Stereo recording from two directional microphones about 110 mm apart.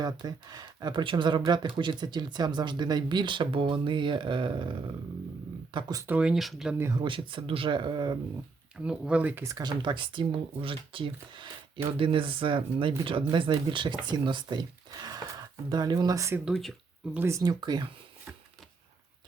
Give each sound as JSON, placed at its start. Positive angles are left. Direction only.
{"t": 0.0, "sound": "speech", "side_deg": -40}
{"t": 6.1, "sound": "speech", "side_deg": -10}
{"t": 6.9, "sound": "speech", "side_deg": -45}
{"t": 8.7, "sound": "speech", "side_deg": -10}
{"t": 9.4, "sound": "speech", "side_deg": -30}
{"t": 16.5, "sound": "speech", "side_deg": 0}
{"t": 17.2, "sound": "speech", "side_deg": -25}